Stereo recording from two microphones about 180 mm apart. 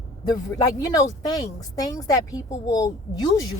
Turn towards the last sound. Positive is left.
turn(degrees=20)  # may be behind; listen again after turning